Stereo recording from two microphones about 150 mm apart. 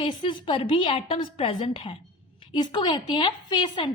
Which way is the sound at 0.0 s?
35° left (ahead or behind).